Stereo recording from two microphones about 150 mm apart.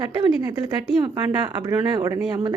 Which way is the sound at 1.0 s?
30° right (ahead or behind).